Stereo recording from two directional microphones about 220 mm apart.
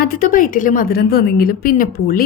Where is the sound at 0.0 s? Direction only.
40° left (ahead or behind).